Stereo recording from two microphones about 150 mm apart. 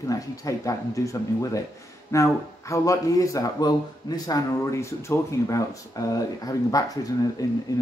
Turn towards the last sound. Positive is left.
turn(degrees=25)  # may be behind; listen again after turning